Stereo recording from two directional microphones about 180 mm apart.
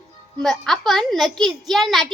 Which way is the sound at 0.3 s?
5° left (ahead or behind).